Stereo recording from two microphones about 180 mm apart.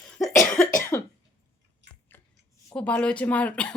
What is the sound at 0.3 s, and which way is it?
Cough, 15° left (ahead or behind).